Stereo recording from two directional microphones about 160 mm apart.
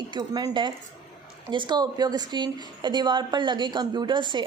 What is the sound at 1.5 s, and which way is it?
A woman's voice, 30° right (ahead or behind).